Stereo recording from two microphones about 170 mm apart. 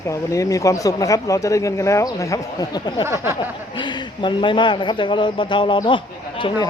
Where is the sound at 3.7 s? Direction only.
30° left (ahead or behind).